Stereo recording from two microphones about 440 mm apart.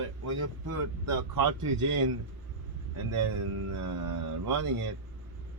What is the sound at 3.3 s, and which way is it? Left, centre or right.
Speech, right.